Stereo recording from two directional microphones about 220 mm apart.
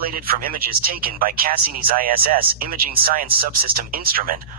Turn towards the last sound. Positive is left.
turn(degrees=-40)  # may be behind; listen again after turning